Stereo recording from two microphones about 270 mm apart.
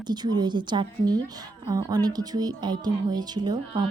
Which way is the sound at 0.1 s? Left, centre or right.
Centre.